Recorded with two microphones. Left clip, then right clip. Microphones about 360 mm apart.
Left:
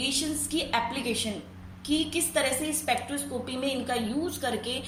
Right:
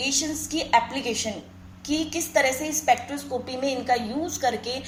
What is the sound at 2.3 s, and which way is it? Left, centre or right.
Speech, centre.